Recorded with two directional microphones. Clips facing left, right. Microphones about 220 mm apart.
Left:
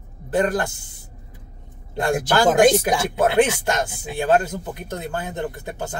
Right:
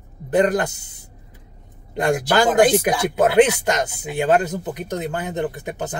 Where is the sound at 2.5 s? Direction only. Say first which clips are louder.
Left 2 dB; 20° left (ahead or behind).